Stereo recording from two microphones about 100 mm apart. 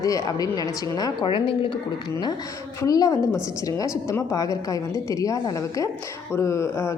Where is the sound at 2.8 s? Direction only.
35° left (ahead or behind).